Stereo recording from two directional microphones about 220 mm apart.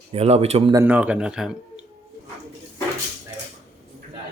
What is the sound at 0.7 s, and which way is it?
Speech, 5° right (ahead or behind).